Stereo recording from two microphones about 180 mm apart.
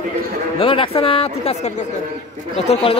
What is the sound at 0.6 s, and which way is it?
Speech, 30° left (ahead or behind).